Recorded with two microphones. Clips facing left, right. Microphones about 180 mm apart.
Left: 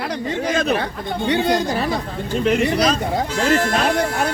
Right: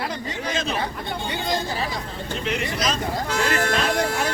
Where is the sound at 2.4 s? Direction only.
45° left (ahead or behind).